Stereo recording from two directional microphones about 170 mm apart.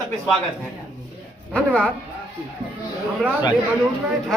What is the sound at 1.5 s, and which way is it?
Speech, 5° left (ahead or behind).